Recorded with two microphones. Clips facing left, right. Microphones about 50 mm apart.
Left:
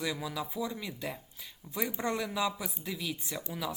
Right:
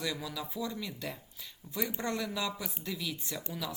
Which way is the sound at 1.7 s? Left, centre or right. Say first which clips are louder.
Left 2 dB; left.